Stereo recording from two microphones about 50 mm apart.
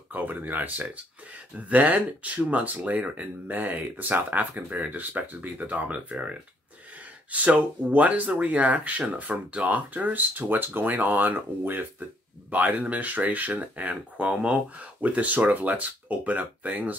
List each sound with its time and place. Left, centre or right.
0.1 s speech: right